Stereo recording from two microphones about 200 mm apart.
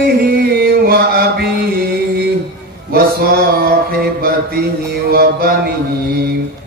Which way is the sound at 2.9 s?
50° right (ahead or behind).